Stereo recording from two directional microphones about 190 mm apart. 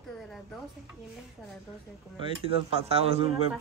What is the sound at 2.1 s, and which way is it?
Speech, 30° right (ahead or behind).